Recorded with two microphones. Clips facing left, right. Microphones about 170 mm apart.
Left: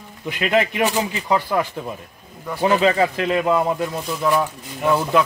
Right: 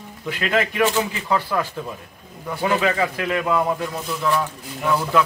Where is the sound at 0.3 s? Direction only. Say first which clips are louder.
Left 3 dB; 20° left (ahead or behind).